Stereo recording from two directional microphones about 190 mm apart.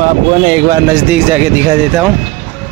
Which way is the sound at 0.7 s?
15° right (ahead or behind).